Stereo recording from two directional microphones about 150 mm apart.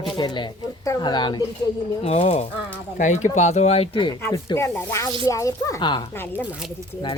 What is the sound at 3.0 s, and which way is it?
Speech, 55° left (ahead or behind).